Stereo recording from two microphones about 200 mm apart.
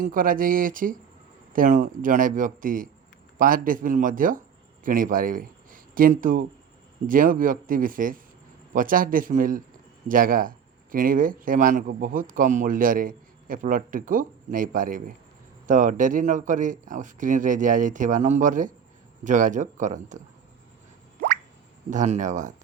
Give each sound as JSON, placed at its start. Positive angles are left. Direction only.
{"t": 0.0, "sound": "a man's voice", "side_deg": -45}
{"t": 21.8, "sound": "speech", "side_deg": -35}